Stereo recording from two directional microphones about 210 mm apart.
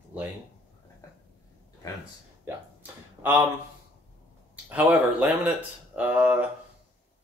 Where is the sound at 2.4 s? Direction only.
10° right (ahead or behind).